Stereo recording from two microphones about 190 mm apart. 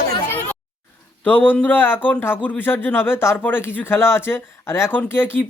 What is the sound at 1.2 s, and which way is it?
Speech, 10° left (ahead or behind).